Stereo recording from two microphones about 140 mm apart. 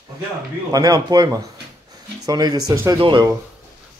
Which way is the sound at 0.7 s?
25° right (ahead or behind).